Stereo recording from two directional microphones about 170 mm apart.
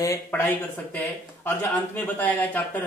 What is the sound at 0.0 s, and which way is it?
Speech, 15° left (ahead or behind).